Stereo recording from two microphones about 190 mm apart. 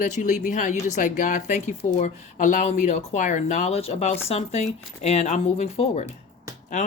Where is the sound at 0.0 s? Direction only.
40° left (ahead or behind).